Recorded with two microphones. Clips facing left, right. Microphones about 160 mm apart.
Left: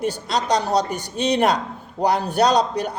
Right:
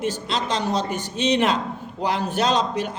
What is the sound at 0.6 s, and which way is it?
A man's voice, 40° left (ahead or behind).